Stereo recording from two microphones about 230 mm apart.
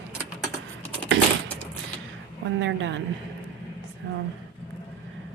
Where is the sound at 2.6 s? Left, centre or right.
Right.